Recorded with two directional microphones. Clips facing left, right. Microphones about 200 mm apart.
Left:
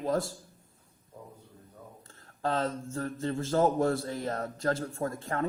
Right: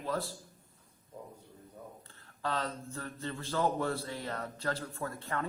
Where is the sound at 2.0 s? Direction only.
45° left (ahead or behind).